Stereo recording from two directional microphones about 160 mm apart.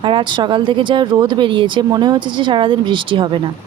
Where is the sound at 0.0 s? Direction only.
30° right (ahead or behind).